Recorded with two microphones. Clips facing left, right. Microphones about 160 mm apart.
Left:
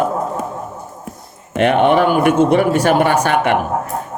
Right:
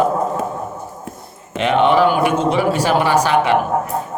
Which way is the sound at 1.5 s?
55° left (ahead or behind).